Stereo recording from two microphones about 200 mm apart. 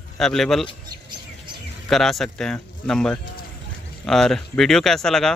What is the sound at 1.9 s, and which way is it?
Speech, centre (ahead or behind).